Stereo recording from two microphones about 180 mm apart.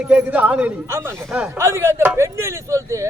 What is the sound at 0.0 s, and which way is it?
A man's voice, 5° right (ahead or behind).